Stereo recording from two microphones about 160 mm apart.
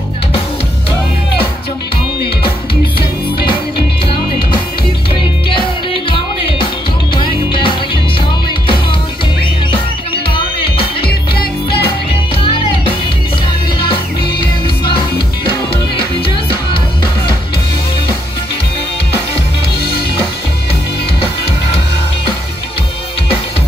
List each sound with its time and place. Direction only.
5.1 s music: 30° left (ahead or behind)
11.1 s music: 80° left
12.4 s music: 35° left (ahead or behind)